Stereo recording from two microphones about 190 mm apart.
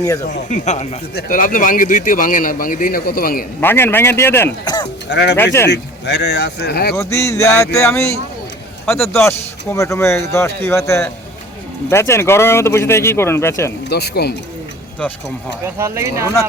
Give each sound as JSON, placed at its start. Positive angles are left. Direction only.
{"t": 0.3, "sound": "speech", "side_deg": 40}
{"t": 3.6, "sound": "speech", "side_deg": 10}
{"t": 5.0, "sound": "speech", "side_deg": 65}
{"t": 6.9, "sound": "speech", "side_deg": 15}
{"t": 13.9, "sound": "speech", "side_deg": 60}
{"t": 15.8, "sound": "speech", "side_deg": -15}